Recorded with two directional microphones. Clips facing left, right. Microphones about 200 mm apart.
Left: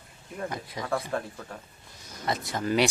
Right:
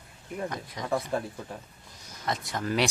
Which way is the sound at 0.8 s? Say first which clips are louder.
Right 2 dB; 20° right (ahead or behind).